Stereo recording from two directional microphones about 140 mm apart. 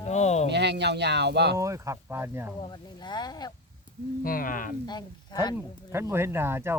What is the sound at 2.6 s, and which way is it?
Speech, 30° left (ahead or behind).